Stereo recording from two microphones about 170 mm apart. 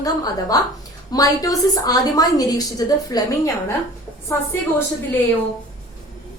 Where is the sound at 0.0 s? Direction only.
20° left (ahead or behind).